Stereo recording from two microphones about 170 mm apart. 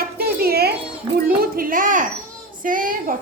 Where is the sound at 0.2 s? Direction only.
65° right (ahead or behind).